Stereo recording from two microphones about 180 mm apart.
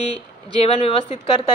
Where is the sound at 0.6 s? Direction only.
30° left (ahead or behind).